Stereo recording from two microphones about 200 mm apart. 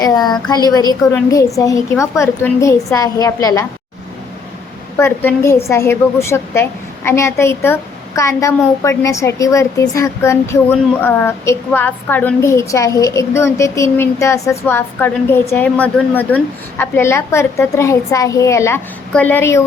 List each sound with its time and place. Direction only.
0.0 s a woman's voice: 20° left (ahead or behind)
4.9 s a woman's voice: 10° left (ahead or behind)